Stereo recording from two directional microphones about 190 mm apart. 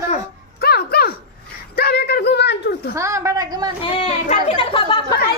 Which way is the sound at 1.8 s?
60° left (ahead or behind).